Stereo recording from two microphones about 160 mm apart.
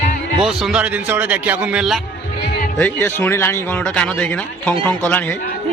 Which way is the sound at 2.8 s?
15° left (ahead or behind).